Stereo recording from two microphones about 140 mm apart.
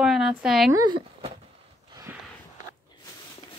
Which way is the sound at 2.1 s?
15° right (ahead or behind).